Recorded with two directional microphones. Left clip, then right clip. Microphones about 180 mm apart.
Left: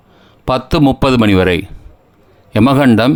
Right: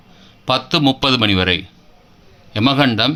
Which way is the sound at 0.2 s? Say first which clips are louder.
Left 2 dB; 60° left (ahead or behind).